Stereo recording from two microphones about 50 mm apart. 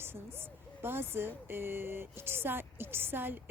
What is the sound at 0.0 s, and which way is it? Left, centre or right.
A woman's voice, right.